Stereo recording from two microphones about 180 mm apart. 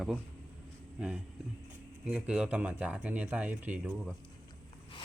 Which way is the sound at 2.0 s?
5° right (ahead or behind).